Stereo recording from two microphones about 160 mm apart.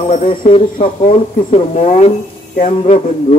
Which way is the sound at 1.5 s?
40° left (ahead or behind).